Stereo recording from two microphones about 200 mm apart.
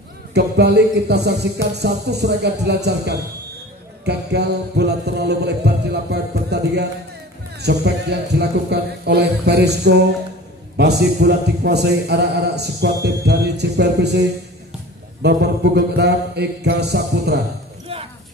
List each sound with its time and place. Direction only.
0.3 s a man's voice: 55° right (ahead or behind)
15.2 s a man's voice: 55° right (ahead or behind)